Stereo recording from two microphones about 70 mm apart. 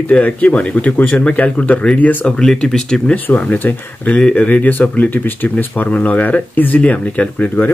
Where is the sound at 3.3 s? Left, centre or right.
Left.